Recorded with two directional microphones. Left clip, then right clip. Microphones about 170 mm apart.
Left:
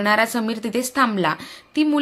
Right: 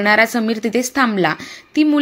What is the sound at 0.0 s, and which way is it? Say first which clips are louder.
A woman's voice: right 5 dB; 15° right (ahead or behind).